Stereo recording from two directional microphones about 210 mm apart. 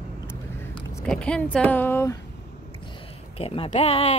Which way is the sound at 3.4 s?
30° left (ahead or behind).